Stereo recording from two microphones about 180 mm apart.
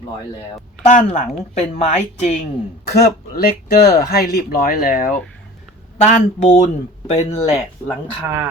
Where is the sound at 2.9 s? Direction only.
60° left (ahead or behind).